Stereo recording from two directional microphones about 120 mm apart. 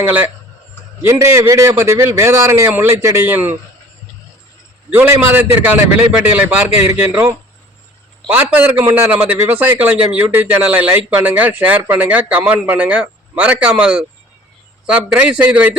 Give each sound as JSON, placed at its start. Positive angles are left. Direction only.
{"t": 0.0, "sound": "a man's voice", "side_deg": -15}
{"t": 4.9, "sound": "a man's voice", "side_deg": -15}
{"t": 8.3, "sound": "a man's voice", "side_deg": -15}